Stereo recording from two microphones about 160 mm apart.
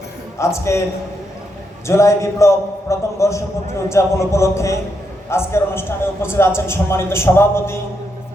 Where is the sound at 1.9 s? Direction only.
20° left (ahead or behind).